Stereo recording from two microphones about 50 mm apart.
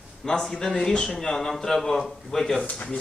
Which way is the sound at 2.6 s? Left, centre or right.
Left.